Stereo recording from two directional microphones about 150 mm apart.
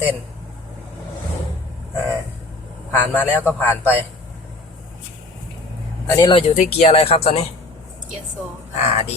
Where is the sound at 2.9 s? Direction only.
10° left (ahead or behind).